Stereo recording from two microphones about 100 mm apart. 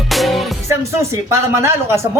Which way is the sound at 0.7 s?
30° right (ahead or behind).